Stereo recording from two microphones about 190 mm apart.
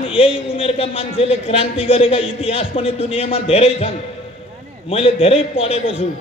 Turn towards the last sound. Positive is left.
turn(degrees=30)  # may be behind; listen again after turning